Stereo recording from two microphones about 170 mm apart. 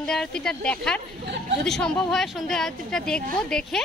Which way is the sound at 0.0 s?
5° left (ahead or behind).